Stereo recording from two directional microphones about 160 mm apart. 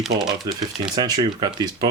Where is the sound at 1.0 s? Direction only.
25° right (ahead or behind).